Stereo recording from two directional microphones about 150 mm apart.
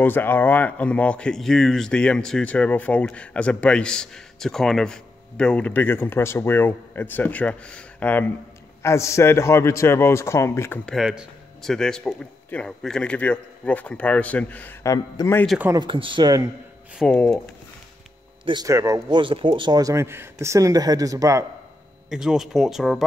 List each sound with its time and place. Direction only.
0.0 s speech: 15° left (ahead or behind)
10.9 s speech: 5° right (ahead or behind); by 15.4 s 20° left (ahead or behind)
15.7 s speech: 30° right (ahead or behind)
16.9 s speech: 5° left (ahead or behind)
18.4 s speech: 30° right (ahead or behind)
22.1 s speech: 5° right (ahead or behind)